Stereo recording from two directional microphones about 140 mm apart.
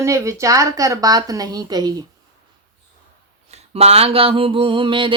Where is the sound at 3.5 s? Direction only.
45° right (ahead or behind).